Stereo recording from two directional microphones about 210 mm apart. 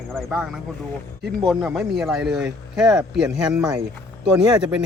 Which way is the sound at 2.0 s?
Centre (ahead or behind).